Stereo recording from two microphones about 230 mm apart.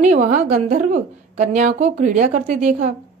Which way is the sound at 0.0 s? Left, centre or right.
Right.